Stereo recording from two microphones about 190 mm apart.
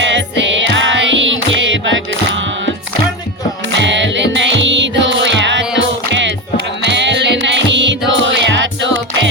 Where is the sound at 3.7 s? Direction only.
70° right (ahead or behind).